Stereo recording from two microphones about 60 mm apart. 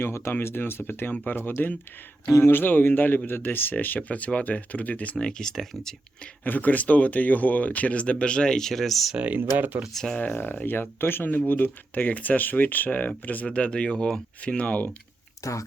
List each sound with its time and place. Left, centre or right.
0.0 s speech: left
1.1 s speech: left
1.4 s speech: left; by 5.9 s centre
6.4 s speech: left; by 9.1 s centre
9.1 s speech: right
9.9 s speech: centre
10.2 s speech: left
15.4 s speech: left